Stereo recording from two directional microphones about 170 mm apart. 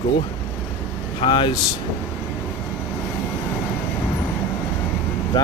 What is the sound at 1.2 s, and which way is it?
Speech, 30° left (ahead or behind).